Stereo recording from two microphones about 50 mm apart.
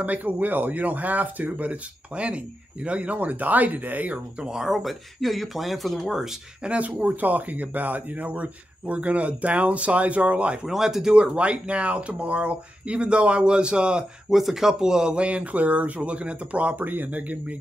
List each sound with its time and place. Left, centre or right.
0.0 s speech: right
4.4 s speech: centre
6.6 s speech: right
10.7 s speech: centre
11.3 s speech: right
14.3 s speech: centre
15.1 s speech: right